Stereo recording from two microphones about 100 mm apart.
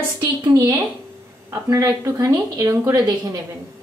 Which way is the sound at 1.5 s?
35° right (ahead or behind).